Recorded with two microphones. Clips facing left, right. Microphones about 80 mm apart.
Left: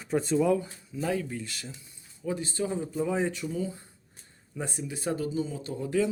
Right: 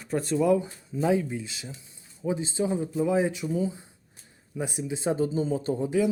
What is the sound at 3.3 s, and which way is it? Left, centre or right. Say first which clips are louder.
Speech: right 4 dB; centre.